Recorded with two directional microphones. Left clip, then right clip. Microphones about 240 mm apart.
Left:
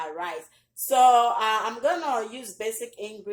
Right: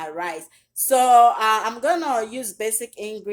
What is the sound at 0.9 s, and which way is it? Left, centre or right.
A woman's voice, right.